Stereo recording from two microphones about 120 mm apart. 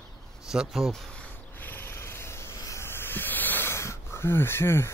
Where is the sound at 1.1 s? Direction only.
15° left (ahead or behind).